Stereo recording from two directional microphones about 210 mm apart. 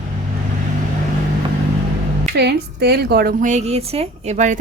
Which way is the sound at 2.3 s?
50° right (ahead or behind).